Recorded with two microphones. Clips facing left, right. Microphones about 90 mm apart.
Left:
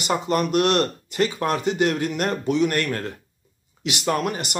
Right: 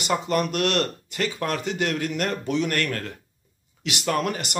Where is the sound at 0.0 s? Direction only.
20° left (ahead or behind).